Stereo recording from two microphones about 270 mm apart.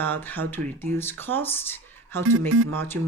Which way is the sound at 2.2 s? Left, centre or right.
Right.